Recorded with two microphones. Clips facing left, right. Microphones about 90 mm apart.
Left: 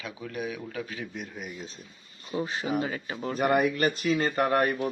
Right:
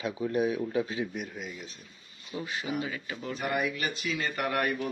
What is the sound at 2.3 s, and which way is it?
Speech, 40° left (ahead or behind).